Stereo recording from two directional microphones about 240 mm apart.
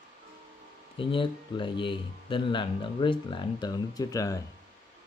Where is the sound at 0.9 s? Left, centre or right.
Left.